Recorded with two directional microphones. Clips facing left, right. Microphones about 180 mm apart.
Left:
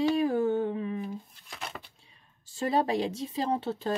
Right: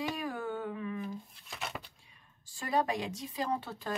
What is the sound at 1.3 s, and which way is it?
Speech, centre (ahead or behind).